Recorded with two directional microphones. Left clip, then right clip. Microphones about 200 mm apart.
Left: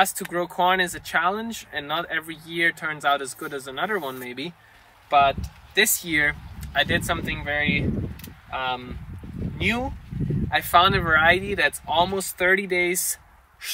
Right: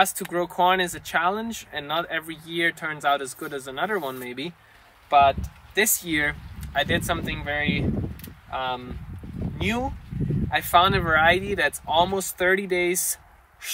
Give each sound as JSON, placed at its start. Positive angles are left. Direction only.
{"t": 0.0, "sound": "speech", "side_deg": -15}